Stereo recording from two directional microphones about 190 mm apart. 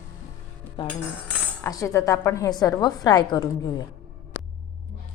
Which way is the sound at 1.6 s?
15° left (ahead or behind).